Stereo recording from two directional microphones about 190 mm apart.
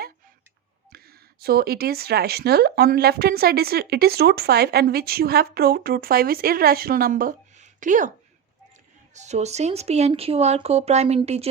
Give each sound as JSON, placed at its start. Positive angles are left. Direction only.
{"t": 0.9, "sound": "speech", "side_deg": -55}
{"t": 9.1, "sound": "speech", "side_deg": -35}